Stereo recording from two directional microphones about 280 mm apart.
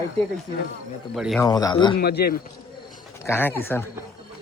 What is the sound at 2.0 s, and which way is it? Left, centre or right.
Speech, left.